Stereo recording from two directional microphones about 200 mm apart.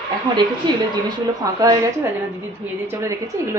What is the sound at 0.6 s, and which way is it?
A woman's voice, 20° right (ahead or behind).